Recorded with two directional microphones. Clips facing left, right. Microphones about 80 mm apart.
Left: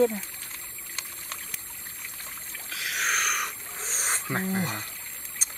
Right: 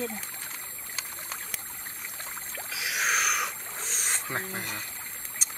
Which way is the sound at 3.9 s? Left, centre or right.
Left.